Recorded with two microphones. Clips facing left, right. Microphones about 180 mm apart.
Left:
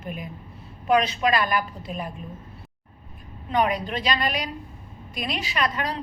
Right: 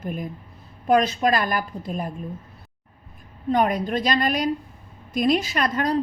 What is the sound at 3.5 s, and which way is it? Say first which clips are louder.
A woman's voice: right 3 dB; 45° right (ahead or behind).